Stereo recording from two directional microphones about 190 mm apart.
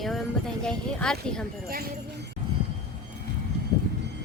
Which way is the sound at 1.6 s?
55° right (ahead or behind).